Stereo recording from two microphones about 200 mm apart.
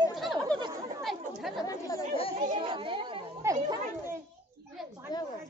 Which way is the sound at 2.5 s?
25° right (ahead or behind).